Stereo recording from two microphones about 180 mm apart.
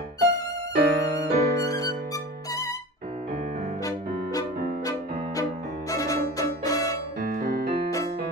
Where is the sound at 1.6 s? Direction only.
20° left (ahead or behind).